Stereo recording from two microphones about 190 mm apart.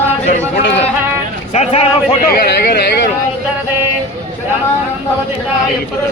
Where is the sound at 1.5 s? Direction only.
35° left (ahead or behind).